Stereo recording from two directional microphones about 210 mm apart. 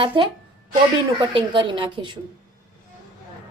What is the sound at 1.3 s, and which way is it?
Speech, 25° right (ahead or behind).